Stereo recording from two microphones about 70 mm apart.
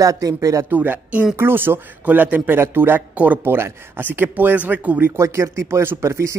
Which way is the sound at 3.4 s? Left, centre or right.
Right.